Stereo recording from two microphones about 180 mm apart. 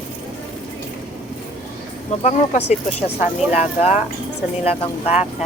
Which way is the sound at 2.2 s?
35° left (ahead or behind).